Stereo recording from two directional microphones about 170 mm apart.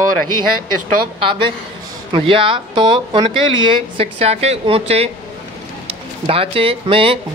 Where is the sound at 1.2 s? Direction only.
30° right (ahead or behind).